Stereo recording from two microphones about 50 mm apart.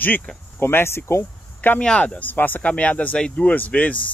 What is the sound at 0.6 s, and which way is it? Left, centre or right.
Speech, left.